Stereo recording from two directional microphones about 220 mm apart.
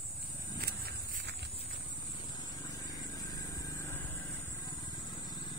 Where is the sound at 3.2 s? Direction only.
15° left (ahead or behind).